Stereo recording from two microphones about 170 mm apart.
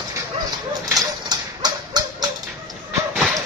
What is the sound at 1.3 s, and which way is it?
Dog, 25° right (ahead or behind).